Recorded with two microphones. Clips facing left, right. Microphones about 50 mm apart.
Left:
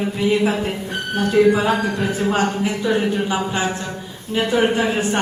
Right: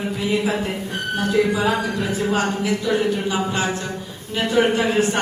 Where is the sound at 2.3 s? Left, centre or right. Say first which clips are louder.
Left 1 dB; left; by 5.2 s centre.